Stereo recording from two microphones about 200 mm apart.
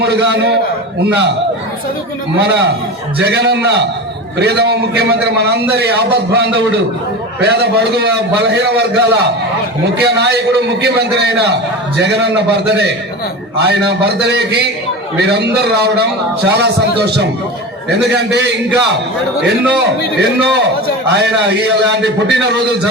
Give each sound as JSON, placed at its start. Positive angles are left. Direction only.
{"t": 0.0, "sound": "a man's voice", "side_deg": -55}
{"t": 2.4, "sound": "a man's voice", "side_deg": -55}